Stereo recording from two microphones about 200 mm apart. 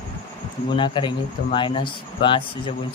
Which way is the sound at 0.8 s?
25° left (ahead or behind).